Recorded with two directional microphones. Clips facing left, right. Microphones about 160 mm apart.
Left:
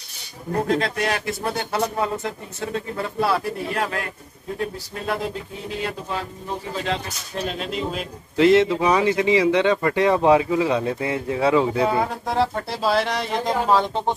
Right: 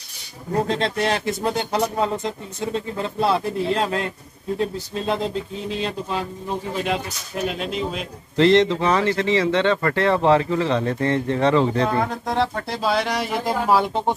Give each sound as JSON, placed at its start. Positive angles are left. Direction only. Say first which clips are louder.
{"t": 0.7, "sound": "speech", "louder": "left 2 dB", "side_deg": -25}
{"t": 7.4, "sound": "a man's voice", "louder": "right 2 dB", "side_deg": 0}